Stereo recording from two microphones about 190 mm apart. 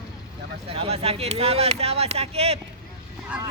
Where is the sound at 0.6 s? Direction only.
30° right (ahead or behind).